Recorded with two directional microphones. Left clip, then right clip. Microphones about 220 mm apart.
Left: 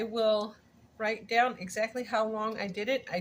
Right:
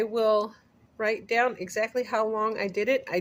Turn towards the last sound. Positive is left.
turn(degrees=-55)  # may be behind; listen again after turning